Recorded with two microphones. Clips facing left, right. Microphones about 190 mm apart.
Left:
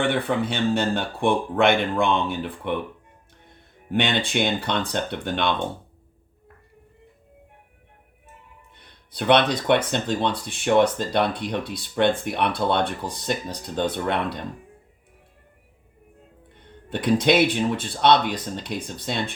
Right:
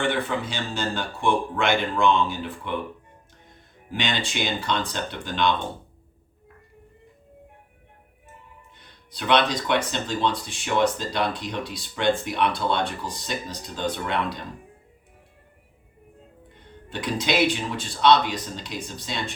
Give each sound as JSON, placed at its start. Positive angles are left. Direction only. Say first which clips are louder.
{"t": 0.0, "sound": "speech", "louder": "left 3 dB", "side_deg": 60}
{"t": 3.9, "sound": "speech", "louder": "left 5 dB", "side_deg": 60}
{"t": 8.8, "sound": "speech", "louder": "left 4 dB", "side_deg": 55}
{"t": 16.9, "sound": "speech", "louder": "left 6 dB", "side_deg": 55}